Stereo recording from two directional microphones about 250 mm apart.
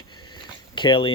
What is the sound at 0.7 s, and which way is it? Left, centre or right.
Speech, centre.